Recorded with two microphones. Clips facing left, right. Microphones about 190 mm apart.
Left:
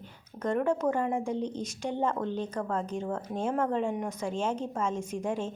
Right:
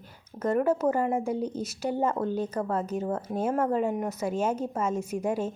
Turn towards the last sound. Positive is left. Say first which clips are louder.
# right 3 dB
turn(degrees=-10)  # may be behind; listen again after turning